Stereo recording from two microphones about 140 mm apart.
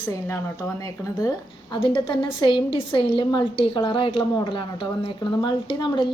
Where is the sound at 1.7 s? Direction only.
35° left (ahead or behind).